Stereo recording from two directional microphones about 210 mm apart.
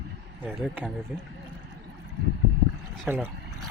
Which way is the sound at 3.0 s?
10° right (ahead or behind).